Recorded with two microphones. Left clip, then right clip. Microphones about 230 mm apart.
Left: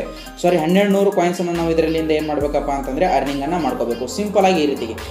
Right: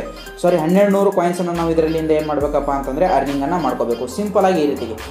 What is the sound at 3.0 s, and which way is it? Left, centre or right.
Speech, right.